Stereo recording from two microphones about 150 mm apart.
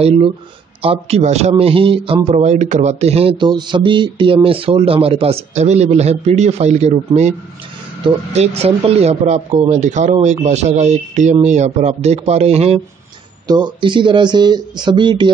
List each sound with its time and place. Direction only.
0.0 s speech: 40° right (ahead or behind)
2.3 s speech: 50° right (ahead or behind)
13.5 s speech: 30° right (ahead or behind)